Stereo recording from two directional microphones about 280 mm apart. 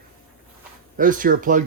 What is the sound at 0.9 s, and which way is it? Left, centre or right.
Speech, right.